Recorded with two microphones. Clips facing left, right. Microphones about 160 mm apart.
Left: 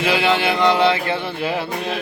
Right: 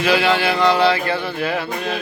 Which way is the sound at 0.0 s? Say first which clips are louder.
Right 1 dB; 25° left (ahead or behind).